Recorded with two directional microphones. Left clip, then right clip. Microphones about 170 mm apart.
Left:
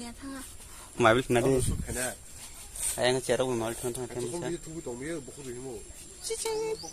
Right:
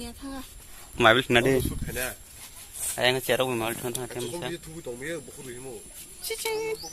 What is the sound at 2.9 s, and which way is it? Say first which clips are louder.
Speech: right 3 dB; 15° right (ahead or behind).